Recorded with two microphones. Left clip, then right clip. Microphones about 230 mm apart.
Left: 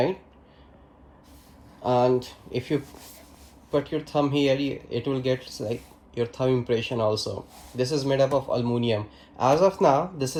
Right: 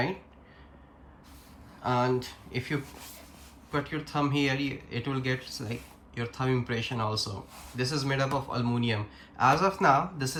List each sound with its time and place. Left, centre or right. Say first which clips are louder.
1.8 s speech: left 6 dB; centre